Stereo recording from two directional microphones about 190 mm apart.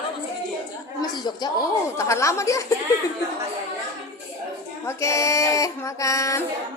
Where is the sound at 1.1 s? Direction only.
20° left (ahead or behind).